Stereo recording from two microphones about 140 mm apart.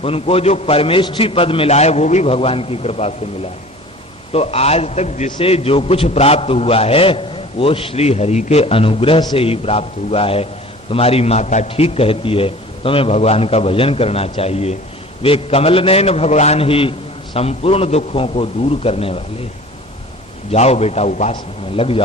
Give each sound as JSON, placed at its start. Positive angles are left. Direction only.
{"t": 0.0, "sound": "a man's voice", "side_deg": 45}
{"t": 4.3, "sound": "a man's voice", "side_deg": 45}
{"t": 20.5, "sound": "a man's voice", "side_deg": 50}
{"t": 21.3, "sound": "a man's voice", "side_deg": 40}